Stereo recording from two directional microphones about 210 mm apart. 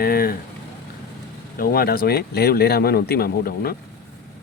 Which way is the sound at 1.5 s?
45° left (ahead or behind).